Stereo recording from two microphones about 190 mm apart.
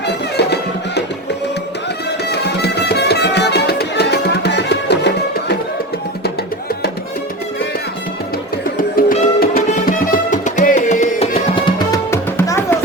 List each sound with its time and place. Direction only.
0.0 s music: 60° left (ahead or behind)
2.3 s music: 60° left (ahead or behind)
9.0 s music: 45° left (ahead or behind); by 11.9 s 25° left (ahead or behind)
12.1 s music: 15° left (ahead or behind)